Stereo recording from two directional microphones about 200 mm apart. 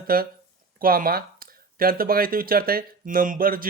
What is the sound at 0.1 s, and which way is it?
Speech, 45° right (ahead or behind).